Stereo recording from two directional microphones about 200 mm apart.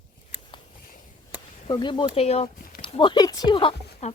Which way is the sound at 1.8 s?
25° left (ahead or behind).